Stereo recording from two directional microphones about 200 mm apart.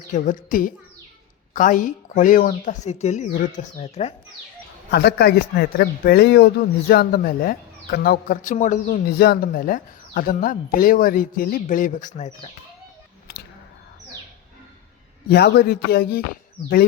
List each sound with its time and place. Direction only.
0.1 s speech: 40° left (ahead or behind)
4.9 s a man's voice: 55° left (ahead or behind); by 12.5 s 35° left (ahead or behind)
13.3 s a sound: 50° left (ahead or behind)
15.3 s a man's voice: 50° left (ahead or behind)